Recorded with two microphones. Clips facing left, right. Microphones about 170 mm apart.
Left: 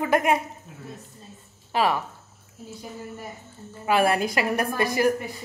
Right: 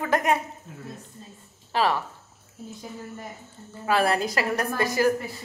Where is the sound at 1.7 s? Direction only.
15° left (ahead or behind).